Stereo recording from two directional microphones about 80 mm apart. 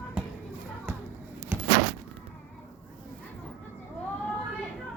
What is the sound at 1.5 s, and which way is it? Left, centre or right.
Door, right.